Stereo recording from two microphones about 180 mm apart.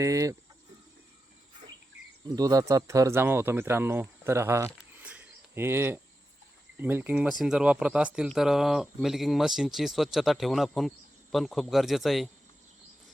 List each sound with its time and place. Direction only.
0.0 s speech: 20° right (ahead or behind)
2.3 s speech: 20° right (ahead or behind); by 12.3 s centre (ahead or behind)